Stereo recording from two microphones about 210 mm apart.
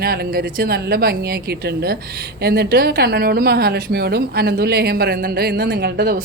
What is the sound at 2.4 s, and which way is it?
Speech, 50° right (ahead or behind).